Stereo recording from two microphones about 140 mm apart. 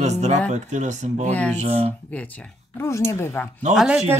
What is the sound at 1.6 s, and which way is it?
Speech, 50° right (ahead or behind).